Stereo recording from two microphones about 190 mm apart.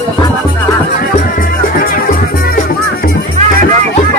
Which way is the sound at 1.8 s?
50° left (ahead or behind).